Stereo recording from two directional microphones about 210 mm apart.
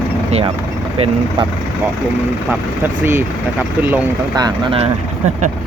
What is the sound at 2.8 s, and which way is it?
Speech, 10° right (ahead or behind).